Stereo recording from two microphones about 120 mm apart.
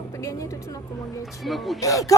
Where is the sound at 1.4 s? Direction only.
Centre (ahead or behind).